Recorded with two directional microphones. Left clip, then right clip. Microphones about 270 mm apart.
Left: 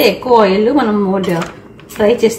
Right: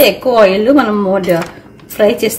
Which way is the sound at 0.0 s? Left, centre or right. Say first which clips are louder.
Right 2 dB; right.